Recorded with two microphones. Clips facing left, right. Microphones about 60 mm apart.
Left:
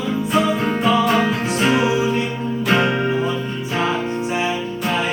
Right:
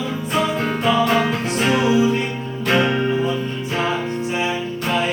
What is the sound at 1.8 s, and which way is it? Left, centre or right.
Music, centre.